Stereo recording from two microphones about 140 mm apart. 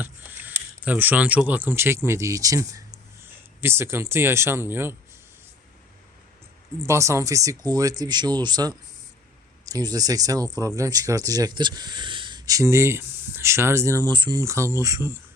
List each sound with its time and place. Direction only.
0.0 s speech: 15° right (ahead or behind)
6.8 s speech: 20° right (ahead or behind)